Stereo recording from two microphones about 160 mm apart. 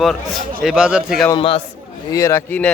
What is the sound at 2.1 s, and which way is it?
Speech, 20° left (ahead or behind).